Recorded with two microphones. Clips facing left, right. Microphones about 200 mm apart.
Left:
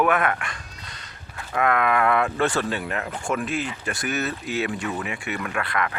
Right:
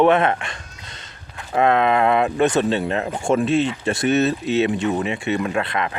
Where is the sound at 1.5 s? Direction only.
25° right (ahead or behind).